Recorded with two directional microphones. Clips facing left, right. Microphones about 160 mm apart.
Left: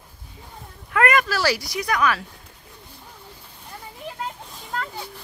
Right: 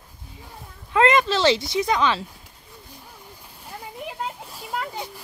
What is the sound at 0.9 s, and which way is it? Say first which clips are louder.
Speech: right 2 dB; 25° right (ahead or behind).